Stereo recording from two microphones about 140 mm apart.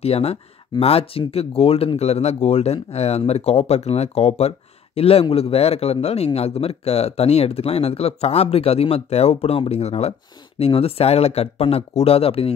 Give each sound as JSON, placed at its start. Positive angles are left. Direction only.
{"t": 0.0, "sound": "speech", "side_deg": 45}